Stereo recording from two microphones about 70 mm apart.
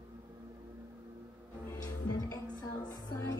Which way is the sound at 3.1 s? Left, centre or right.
Left.